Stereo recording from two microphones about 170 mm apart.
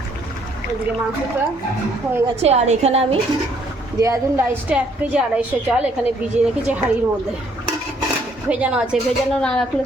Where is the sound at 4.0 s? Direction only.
20° right (ahead or behind).